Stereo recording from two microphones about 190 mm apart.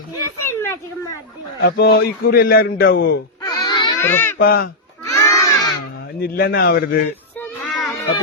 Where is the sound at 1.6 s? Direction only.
55° left (ahead or behind).